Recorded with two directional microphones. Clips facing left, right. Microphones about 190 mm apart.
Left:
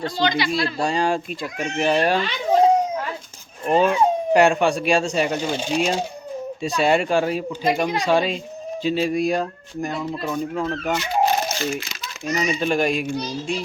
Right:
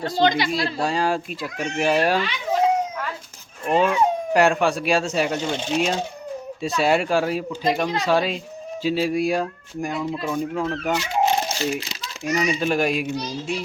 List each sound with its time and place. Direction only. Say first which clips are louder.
0.2 s speech: right 2 dB; 50° right (ahead or behind)
0.8 s speech: left 1 dB; 5° right (ahead or behind)
1.5 s speech: even; 15° left (ahead or behind)
1.8 s a child's voice: even; 5° right (ahead or behind)
2.2 s children playing: left 4 dB; 30° left (ahead or behind)
3.7 s speech: left 2 dB; centre (ahead or behind)
5.4 s speech: left 1 dB; 10° left (ahead or behind)
6.6 s speech: left 1 dB; centre (ahead or behind)
11.2 s crumpling: left 1 dB; 25° right (ahead or behind)
12.4 s a child's voice: left 1 dB; 5° right (ahead or behind)